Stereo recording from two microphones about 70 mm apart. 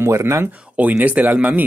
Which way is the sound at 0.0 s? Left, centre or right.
Right.